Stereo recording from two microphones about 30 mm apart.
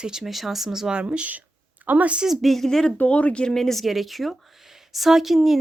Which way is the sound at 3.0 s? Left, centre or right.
Left.